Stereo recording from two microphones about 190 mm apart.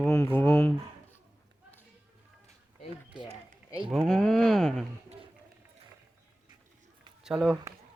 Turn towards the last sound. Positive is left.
turn(degrees=0)  # may be behind; listen again after turning